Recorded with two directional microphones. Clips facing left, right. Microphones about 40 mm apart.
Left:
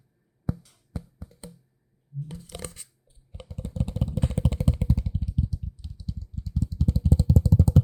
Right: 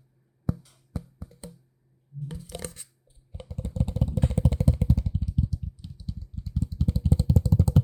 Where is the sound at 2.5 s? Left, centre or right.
Centre.